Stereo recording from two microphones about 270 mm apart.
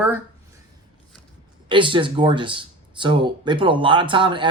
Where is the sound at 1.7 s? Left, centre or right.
Centre.